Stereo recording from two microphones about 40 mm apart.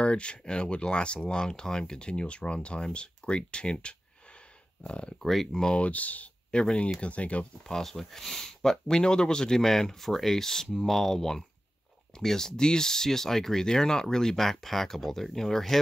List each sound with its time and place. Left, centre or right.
0.0 s speech: left
5.2 s speech: centre
5.8 s speech: left
6.5 s speech: left
7.6 s speech: centre